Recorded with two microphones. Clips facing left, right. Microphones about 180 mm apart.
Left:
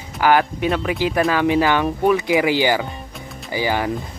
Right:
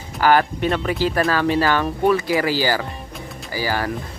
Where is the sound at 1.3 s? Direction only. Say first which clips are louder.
Left 2 dB; 15° left (ahead or behind).